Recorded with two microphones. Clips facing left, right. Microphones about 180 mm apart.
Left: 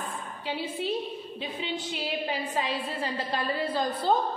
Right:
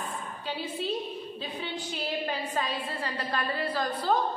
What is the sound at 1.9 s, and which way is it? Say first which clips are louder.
A woman's voice: right 1 dB; 15° left (ahead or behind).